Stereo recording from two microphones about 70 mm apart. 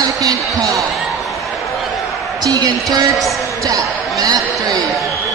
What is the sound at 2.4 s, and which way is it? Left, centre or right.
A woman's voice, right.